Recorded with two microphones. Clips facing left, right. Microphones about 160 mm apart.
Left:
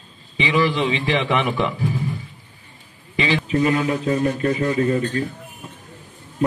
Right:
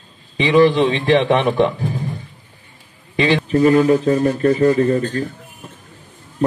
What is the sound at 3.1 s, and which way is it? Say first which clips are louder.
A man's voice: right 5 dB; 40° right (ahead or behind).